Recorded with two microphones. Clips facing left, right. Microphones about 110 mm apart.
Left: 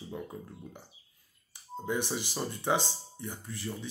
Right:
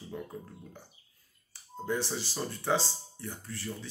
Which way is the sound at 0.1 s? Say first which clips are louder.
Right 1 dB; 15° left (ahead or behind).